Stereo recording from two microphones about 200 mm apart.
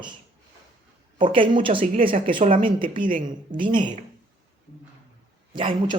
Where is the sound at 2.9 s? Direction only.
40° right (ahead or behind).